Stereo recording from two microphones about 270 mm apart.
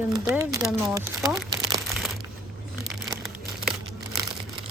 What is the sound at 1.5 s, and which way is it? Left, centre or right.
Crumpling, centre.